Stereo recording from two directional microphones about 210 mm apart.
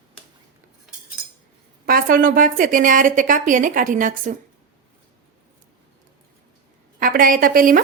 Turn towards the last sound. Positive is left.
turn(degrees=-40)  # may be behind; listen again after turning